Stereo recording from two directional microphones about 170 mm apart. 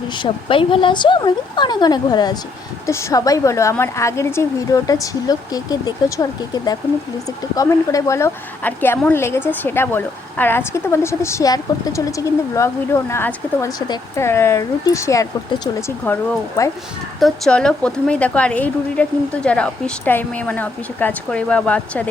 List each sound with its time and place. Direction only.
0.1 s a woman's voice: 30° left (ahead or behind)
17.2 s a woman's voice: centre (ahead or behind)